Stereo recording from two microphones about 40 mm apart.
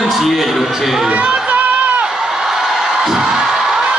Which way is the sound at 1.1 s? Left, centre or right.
Right.